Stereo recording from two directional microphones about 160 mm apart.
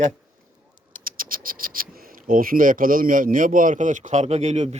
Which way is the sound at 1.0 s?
60° right (ahead or behind).